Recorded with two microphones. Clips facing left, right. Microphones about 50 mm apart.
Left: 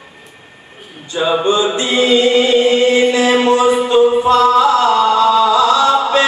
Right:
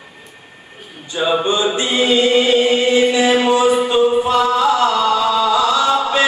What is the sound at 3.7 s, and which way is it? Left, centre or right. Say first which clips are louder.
Music: left 3 dB; centre.